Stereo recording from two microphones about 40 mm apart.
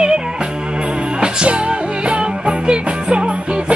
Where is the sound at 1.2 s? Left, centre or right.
Right.